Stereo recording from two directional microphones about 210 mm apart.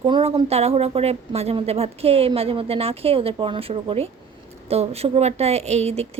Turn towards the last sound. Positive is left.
turn(degrees=-30)  # may be behind; listen again after turning